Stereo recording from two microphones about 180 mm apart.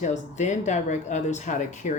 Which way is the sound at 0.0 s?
40° left (ahead or behind).